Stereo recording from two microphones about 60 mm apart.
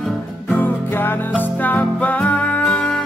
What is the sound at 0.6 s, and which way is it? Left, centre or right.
Music, left.